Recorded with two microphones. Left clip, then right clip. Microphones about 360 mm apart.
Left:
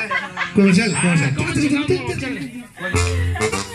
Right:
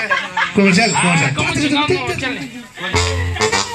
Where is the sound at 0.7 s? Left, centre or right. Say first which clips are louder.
Right 5 dB; right.